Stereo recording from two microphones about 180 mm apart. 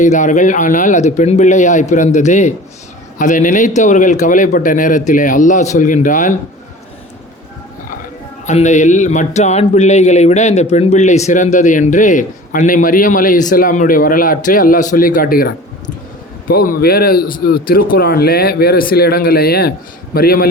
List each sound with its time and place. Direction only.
0.0 s speech: 45° left (ahead or behind)
8.4 s a man's voice: 40° left (ahead or behind)